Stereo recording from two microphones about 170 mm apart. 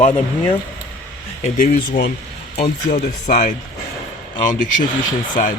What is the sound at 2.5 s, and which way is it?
Speech, 65° left (ahead or behind).